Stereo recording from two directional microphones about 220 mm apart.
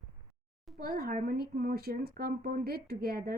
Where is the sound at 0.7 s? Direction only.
45° right (ahead or behind).